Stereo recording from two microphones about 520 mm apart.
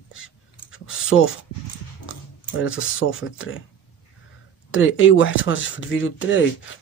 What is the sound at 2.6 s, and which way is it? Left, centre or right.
Speech, left.